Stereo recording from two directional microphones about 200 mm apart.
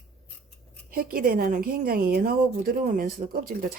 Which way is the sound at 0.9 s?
45° right (ahead or behind).